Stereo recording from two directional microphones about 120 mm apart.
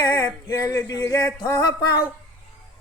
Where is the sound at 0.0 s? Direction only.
35° left (ahead or behind).